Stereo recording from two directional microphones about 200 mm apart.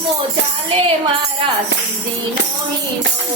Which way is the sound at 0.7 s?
25° right (ahead or behind).